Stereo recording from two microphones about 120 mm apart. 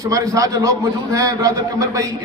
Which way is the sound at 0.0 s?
30° right (ahead or behind).